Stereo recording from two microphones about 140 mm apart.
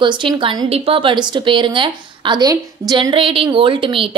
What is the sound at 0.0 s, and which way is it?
A woman's voice, 35° right (ahead or behind).